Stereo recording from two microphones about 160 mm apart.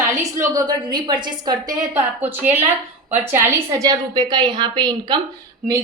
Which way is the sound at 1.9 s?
10° right (ahead or behind).